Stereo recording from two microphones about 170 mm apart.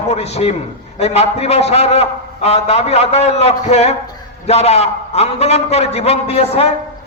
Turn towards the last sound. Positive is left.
turn(degrees=35)  # may be behind; listen again after turning